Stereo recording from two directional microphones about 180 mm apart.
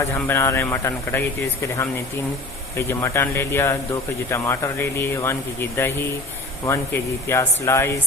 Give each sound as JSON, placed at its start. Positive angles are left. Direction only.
{"t": 0.1, "sound": "speech", "side_deg": 15}
{"t": 2.7, "sound": "speech", "side_deg": 15}